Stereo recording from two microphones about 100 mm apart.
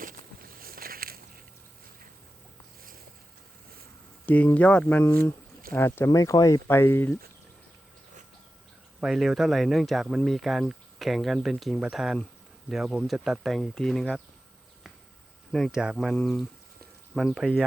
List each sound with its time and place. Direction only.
4.3 s speech: 15° left (ahead or behind)
5.0 s speech: 25° left (ahead or behind)
6.1 s speech: 35° left (ahead or behind)
9.0 s speech: 5° right (ahead or behind)
15.5 s speech: centre (ahead or behind)
17.3 s speech: 5° right (ahead or behind)